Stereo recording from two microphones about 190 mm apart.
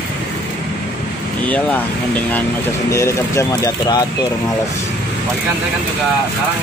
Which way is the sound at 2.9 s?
15° left (ahead or behind).